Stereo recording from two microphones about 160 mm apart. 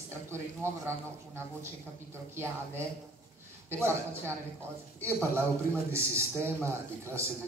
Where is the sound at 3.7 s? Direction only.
15° right (ahead or behind).